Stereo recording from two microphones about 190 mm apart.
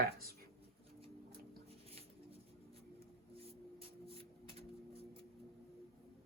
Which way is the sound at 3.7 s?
30° right (ahead or behind).